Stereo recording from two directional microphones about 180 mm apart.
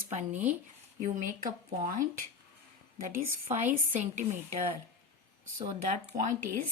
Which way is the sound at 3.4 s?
40° right (ahead or behind).